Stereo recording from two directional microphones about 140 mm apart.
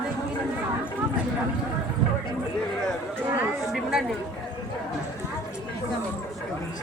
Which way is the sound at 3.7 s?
5° right (ahead or behind).